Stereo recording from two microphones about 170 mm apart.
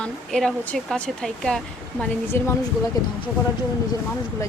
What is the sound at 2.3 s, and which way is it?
Speech, 15° left (ahead or behind).